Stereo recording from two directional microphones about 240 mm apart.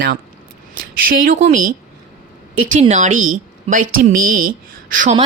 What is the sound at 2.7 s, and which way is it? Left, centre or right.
A woman's voice, right.